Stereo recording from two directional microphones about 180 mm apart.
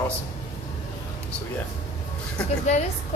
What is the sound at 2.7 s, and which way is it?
Speech, 40° left (ahead or behind).